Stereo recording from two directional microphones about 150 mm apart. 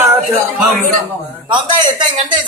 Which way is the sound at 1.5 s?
30° right (ahead or behind).